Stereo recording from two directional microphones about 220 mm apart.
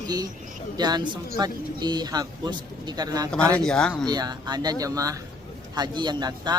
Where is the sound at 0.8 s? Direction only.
20° right (ahead or behind).